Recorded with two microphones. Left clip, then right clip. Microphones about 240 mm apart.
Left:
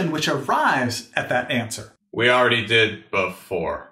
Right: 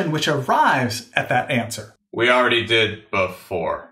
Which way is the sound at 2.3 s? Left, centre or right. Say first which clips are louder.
Right 1 dB; right.